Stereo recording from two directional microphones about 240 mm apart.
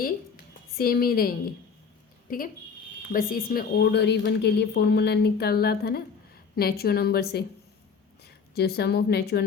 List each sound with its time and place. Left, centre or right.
0.8 s a woman's voice: left